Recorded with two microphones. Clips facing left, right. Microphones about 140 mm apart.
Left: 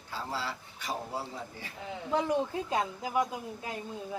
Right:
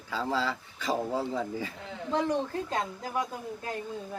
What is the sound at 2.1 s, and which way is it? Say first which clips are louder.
A woman's voice: right 1 dB; 10° left (ahead or behind).